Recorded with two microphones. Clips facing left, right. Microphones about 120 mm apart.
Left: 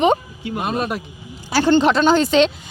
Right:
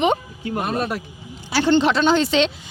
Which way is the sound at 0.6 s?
20° left (ahead or behind).